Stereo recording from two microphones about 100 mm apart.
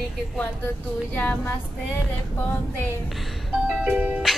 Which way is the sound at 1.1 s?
15° left (ahead or behind).